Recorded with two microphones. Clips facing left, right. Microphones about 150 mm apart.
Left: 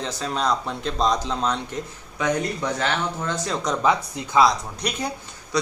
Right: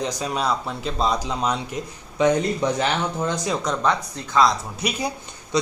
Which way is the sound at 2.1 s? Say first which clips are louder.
Right 5 dB; 25° right (ahead or behind).